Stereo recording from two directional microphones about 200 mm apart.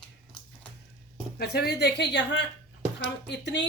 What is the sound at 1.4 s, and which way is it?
Speech, 50° left (ahead or behind).